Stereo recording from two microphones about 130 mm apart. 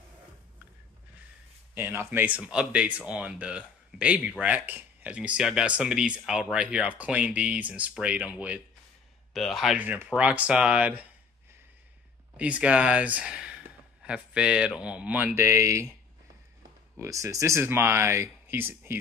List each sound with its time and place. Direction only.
1.8 s speech: 15° right (ahead or behind)
9.3 s speech: centre (ahead or behind)
9.8 s speech: 15° right (ahead or behind)
12.4 s speech: 10° right (ahead or behind)
16.9 s speech: 20° right (ahead or behind)